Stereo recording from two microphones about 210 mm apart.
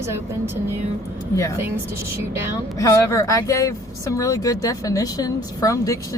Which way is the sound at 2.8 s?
15° left (ahead or behind).